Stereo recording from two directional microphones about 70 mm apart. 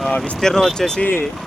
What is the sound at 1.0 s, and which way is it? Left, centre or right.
Speech, left.